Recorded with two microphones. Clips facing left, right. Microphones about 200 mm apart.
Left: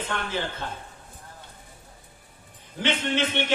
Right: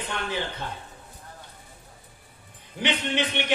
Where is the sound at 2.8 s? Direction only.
15° right (ahead or behind).